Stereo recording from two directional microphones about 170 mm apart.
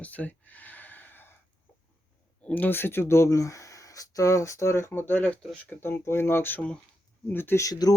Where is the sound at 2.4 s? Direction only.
10° left (ahead or behind).